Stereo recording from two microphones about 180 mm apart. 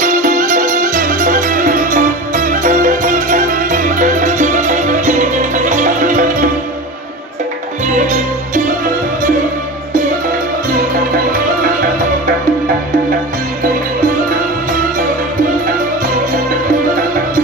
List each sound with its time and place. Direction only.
0.0 s music: 45° right (ahead or behind)
7.9 s music: 45° right (ahead or behind)